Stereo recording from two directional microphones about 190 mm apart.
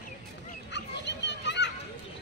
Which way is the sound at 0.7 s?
65° left (ahead or behind).